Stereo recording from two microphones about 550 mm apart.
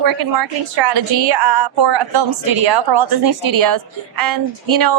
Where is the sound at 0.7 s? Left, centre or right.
Right.